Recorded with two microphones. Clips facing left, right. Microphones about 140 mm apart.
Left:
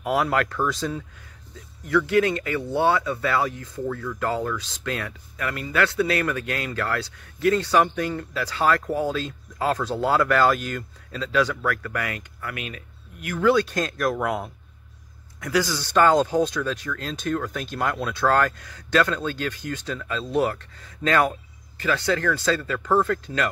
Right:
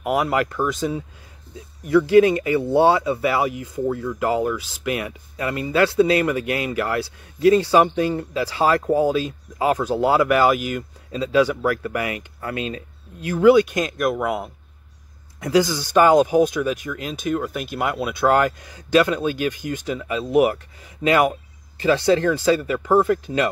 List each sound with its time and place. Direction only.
0.0 s speech: 5° right (ahead or behind)
1.5 s speech: 20° right (ahead or behind); by 14.5 s 5° right (ahead or behind)
15.4 s speech: 20° right (ahead or behind)